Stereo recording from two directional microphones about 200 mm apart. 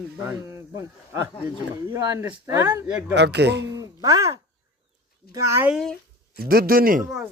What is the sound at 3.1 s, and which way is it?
Speech, 60° right (ahead or behind).